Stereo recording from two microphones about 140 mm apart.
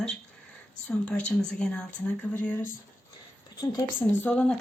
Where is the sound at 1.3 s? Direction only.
5° left (ahead or behind).